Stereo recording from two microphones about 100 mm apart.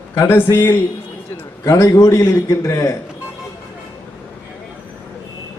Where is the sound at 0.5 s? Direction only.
25° left (ahead or behind).